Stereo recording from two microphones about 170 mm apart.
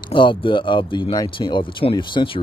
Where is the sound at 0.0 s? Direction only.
30° left (ahead or behind).